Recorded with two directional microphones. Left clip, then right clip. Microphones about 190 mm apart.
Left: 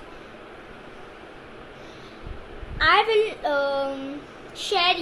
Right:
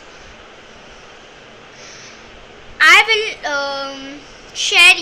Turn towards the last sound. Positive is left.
turn(degrees=-20)  # may be behind; listen again after turning